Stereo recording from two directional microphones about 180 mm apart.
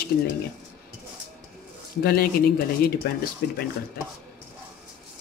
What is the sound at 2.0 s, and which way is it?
Speech, 55° left (ahead or behind).